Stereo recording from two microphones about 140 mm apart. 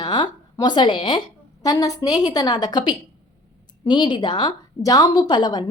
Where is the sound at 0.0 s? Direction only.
30° left (ahead or behind).